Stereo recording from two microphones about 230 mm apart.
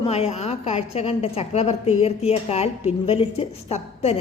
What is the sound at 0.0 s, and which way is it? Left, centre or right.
A woman's voice, left.